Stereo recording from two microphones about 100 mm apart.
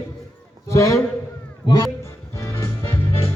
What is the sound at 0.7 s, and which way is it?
Speech, 30° left (ahead or behind).